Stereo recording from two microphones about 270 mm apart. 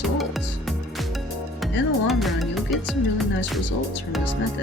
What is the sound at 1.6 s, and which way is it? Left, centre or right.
Speech, centre.